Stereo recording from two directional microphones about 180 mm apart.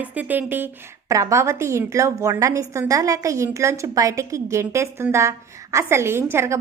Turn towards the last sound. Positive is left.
turn(degrees=-15)  # may be behind; listen again after turning